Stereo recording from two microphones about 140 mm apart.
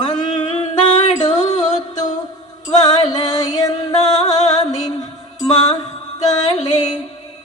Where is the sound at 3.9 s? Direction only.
55° left (ahead or behind).